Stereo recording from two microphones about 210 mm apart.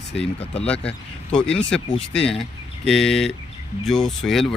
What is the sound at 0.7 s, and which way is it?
Speech, 5° left (ahead or behind).